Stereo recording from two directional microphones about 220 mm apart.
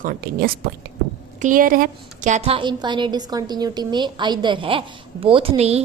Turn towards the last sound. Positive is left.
turn(degrees=-30)  # may be behind; listen again after turning